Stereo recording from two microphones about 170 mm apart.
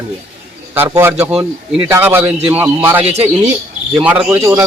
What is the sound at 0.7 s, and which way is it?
A man's voice, 15° right (ahead or behind).